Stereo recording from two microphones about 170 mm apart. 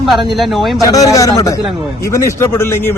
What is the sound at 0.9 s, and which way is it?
A man's voice, 20° left (ahead or behind).